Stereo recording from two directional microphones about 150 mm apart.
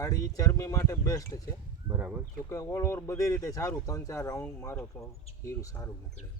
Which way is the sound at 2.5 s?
20° left (ahead or behind).